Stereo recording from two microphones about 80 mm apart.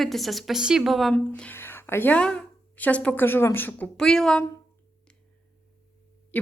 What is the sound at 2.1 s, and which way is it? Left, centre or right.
A woman's voice, centre.